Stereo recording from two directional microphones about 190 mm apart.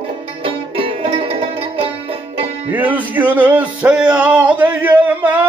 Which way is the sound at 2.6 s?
10° right (ahead or behind).